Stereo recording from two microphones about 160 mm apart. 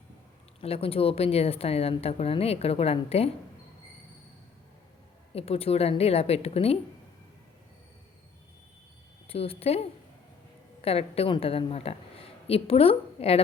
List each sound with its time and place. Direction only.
0.6 s a woman's voice: 40° left (ahead or behind)
5.3 s a woman's voice: 40° left (ahead or behind)
9.3 s a woman's voice: 40° left (ahead or behind)